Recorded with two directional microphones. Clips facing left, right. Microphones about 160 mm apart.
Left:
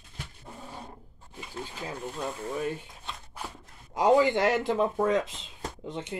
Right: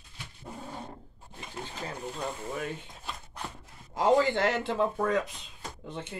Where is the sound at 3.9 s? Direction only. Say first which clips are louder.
Left 2 dB; 15° left (ahead or behind).